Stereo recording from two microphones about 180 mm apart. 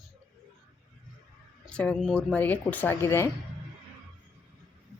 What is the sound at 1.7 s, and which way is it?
Speech, 5° left (ahead or behind).